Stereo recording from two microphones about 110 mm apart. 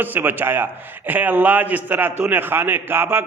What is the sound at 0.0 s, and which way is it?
A man's voice, 15° right (ahead or behind).